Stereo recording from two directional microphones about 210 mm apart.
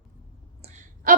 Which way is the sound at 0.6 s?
35° right (ahead or behind).